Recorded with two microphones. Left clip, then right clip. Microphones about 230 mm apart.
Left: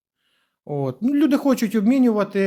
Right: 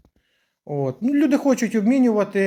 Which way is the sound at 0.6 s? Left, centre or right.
Left.